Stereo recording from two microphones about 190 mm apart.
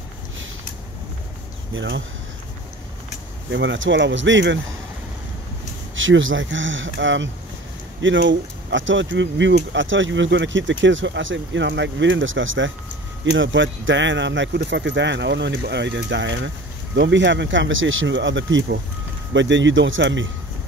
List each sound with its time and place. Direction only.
1.7 s speech: 75° right (ahead or behind)
3.5 s speech: 75° right (ahead or behind)
5.9 s speech: 90° right